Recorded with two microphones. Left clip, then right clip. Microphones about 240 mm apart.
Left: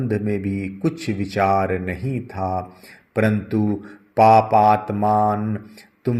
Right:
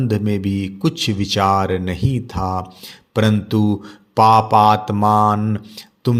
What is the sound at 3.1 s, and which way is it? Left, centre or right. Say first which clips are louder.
A man's voice: right 2 dB; right.